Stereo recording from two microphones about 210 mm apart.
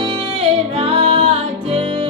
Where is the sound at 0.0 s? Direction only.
30° right (ahead or behind).